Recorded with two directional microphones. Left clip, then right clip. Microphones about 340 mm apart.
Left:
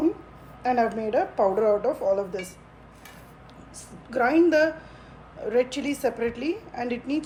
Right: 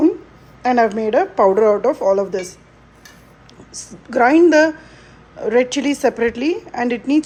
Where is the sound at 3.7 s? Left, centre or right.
Right.